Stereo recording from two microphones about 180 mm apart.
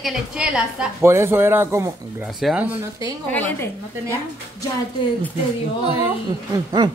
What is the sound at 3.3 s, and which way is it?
Speech, 10° left (ahead or behind).